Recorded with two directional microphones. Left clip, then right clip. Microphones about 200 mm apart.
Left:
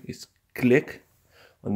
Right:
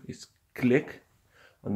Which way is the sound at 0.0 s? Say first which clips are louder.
Left 4 dB; 25° left (ahead or behind).